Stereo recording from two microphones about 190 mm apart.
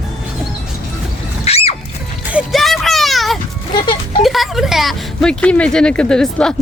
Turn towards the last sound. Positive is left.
turn(degrees=5)  # may be behind; listen again after turning